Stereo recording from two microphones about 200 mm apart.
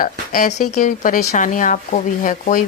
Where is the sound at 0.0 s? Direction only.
40° left (ahead or behind).